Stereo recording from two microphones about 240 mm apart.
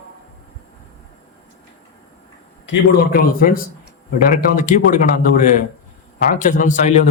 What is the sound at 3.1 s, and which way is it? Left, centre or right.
A man's voice, left.